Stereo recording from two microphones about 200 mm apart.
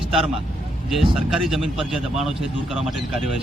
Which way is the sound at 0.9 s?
Centre (ahead or behind).